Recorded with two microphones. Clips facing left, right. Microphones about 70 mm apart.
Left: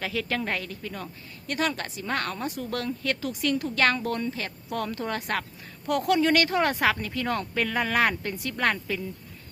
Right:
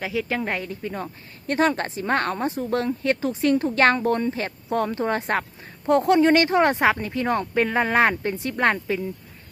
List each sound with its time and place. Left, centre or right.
0.0 s speech: centre